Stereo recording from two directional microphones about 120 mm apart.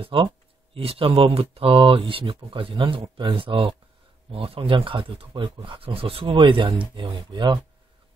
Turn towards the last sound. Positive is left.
turn(degrees=-40)  # may be behind; listen again after turning